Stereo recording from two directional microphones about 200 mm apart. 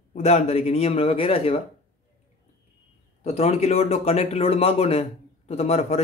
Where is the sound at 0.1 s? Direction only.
35° left (ahead or behind).